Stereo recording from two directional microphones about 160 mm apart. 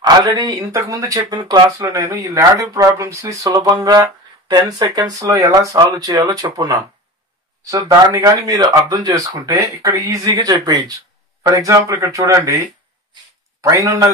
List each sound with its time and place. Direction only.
0.0 s speech: 25° right (ahead or behind)